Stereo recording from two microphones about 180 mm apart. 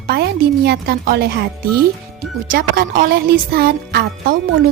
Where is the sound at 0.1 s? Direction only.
60° right (ahead or behind).